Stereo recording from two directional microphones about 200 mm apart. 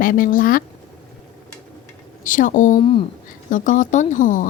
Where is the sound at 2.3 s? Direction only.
40° left (ahead or behind).